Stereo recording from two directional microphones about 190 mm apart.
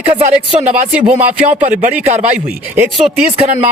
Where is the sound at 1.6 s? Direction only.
45° right (ahead or behind).